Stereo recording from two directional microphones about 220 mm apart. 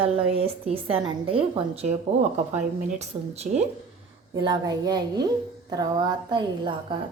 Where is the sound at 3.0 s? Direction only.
30° right (ahead or behind).